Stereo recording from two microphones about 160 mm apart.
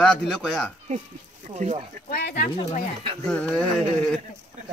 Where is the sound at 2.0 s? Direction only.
75° left (ahead or behind).